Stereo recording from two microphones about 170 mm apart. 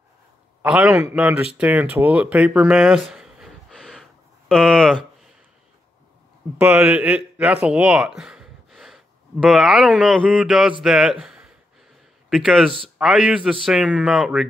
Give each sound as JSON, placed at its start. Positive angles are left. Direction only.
{"t": 0.6, "sound": "a man's voice", "side_deg": -5}
{"t": 6.6, "sound": "a man's voice", "side_deg": -5}